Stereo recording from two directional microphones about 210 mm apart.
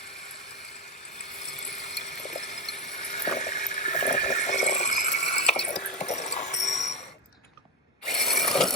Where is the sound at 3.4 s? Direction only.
35° left (ahead or behind).